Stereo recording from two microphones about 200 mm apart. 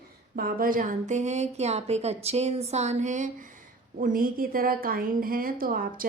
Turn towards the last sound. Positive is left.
turn(degrees=-45)  # may be behind; listen again after turning